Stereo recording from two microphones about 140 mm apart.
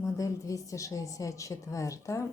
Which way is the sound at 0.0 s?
20° left (ahead or behind).